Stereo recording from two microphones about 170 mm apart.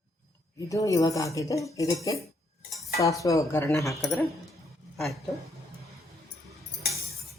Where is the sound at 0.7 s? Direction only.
20° left (ahead or behind).